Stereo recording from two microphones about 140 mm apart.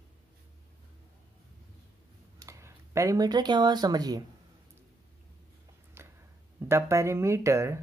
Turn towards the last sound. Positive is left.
turn(degrees=-20)  # may be behind; listen again after turning